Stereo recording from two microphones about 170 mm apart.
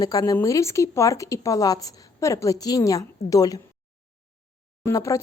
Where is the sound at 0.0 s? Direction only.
20° left (ahead or behind).